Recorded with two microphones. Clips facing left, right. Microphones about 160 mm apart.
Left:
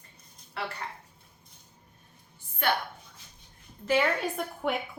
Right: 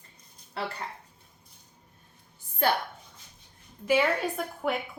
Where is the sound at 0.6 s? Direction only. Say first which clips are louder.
Right 2 dB; 30° right (ahead or behind).